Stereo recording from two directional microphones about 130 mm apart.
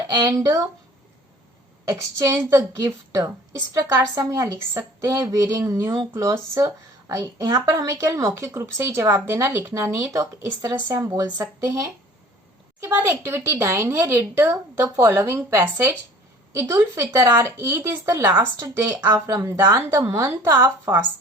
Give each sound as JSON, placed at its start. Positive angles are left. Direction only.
{"t": 0.1, "sound": "speech", "side_deg": -30}
{"t": 1.9, "sound": "speech", "side_deg": -25}
{"t": 12.8, "sound": "speech", "side_deg": -15}